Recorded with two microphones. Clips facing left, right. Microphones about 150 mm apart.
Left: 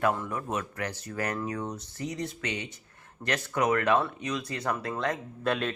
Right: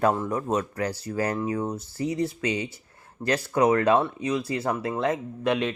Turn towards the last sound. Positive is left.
turn(degrees=-15)  # may be behind; listen again after turning